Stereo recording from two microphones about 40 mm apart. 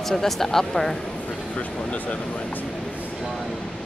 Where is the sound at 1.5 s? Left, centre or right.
Left.